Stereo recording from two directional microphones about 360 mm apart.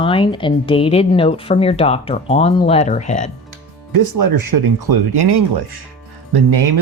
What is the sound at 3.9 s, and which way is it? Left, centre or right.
Speech, right.